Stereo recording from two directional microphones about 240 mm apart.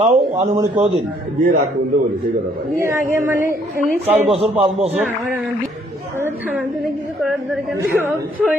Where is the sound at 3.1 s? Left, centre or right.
Centre.